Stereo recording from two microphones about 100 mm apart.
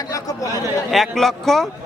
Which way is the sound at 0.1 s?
35° left (ahead or behind).